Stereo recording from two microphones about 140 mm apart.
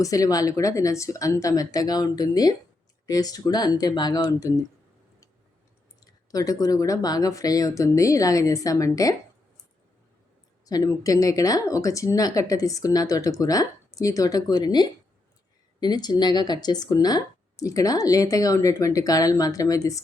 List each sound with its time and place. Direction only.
0.0 s speech: 25° left (ahead or behind)
6.0 s speech: 25° left (ahead or behind)
10.7 s speech: 25° left (ahead or behind)